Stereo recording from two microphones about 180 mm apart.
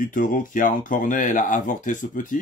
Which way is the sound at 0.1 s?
50° left (ahead or behind).